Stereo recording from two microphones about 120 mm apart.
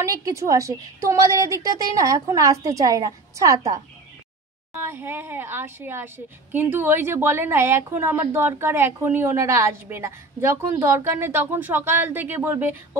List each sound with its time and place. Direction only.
0.0 s a woman's voice: 25° right (ahead or behind)